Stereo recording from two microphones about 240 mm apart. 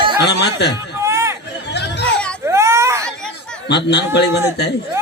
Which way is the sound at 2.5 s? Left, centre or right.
Centre.